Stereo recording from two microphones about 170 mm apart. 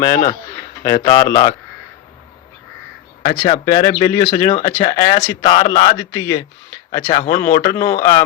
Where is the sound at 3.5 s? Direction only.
20° left (ahead or behind).